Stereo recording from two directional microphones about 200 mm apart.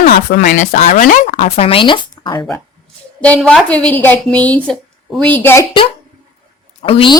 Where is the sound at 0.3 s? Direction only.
40° left (ahead or behind); by 2.6 s 20° left (ahead or behind).